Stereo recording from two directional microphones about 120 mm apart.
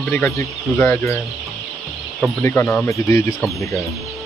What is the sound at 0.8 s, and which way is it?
Speech, 15° left (ahead or behind).